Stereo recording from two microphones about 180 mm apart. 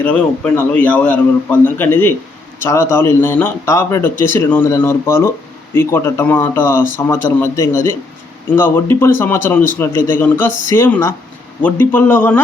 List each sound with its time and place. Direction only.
0.0 s speech: 5° left (ahead or behind)